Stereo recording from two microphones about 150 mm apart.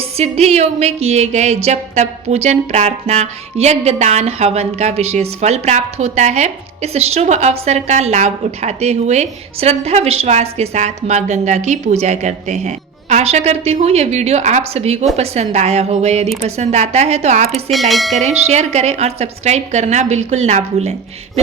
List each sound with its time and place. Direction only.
0.2 s speech: 45° right (ahead or behind)
17.5 s speech: centre (ahead or behind)
18.2 s speech: 45° right (ahead or behind)